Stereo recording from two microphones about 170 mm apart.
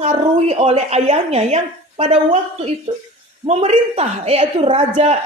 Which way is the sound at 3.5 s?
40° right (ahead or behind).